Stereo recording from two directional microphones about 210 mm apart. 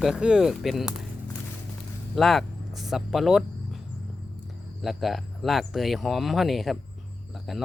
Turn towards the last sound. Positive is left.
turn(degrees=0)  # may be behind; listen again after turning